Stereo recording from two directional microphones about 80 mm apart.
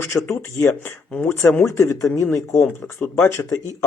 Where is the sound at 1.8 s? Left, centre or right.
Left.